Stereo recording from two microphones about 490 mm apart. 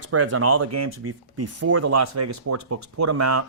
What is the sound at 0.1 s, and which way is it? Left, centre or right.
Speech, right.